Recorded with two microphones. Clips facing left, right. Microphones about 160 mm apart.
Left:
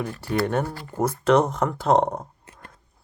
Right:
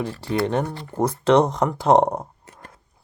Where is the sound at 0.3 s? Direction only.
20° right (ahead or behind).